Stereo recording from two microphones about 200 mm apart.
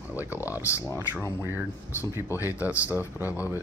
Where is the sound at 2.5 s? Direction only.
10° right (ahead or behind).